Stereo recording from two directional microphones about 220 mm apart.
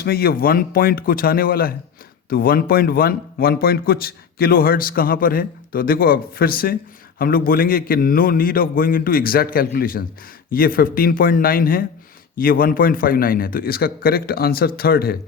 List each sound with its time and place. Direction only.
0.0 s a man's voice: 45° left (ahead or behind)